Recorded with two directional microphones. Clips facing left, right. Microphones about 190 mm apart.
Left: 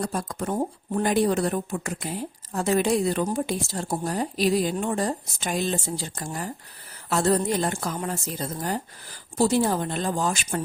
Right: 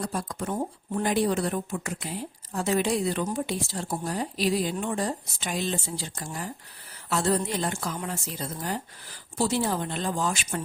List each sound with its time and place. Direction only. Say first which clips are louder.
0.0 s speech: left 3 dB; 45° left (ahead or behind)